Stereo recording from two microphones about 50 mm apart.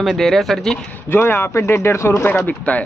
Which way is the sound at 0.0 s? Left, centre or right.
Centre.